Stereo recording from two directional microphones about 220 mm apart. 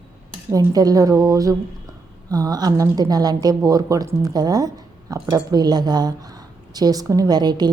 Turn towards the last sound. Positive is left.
turn(degrees=-20)  # may be behind; listen again after turning